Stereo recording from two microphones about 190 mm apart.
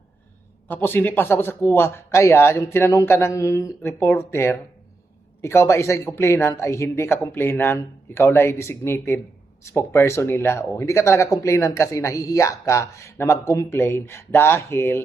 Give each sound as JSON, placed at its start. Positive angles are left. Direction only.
{"t": 0.7, "sound": "speech", "side_deg": 10}